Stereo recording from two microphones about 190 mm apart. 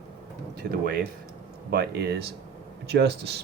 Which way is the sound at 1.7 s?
60° right (ahead or behind).